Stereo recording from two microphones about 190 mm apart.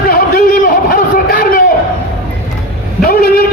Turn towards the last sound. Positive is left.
turn(degrees=50)  # may be behind; listen again after turning